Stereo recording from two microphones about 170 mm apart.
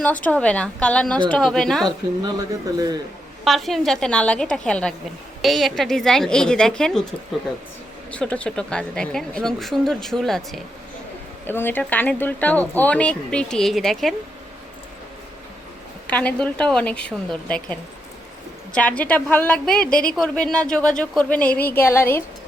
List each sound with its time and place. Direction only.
0.0 s speech: 10° left (ahead or behind)
2.2 s a man's voice: 20° right (ahead or behind)
3.4 s speech: centre (ahead or behind)
8.1 s speech: 5° left (ahead or behind)
11.4 s speech: 10° left (ahead or behind)
16.0 s speech: 10° left (ahead or behind)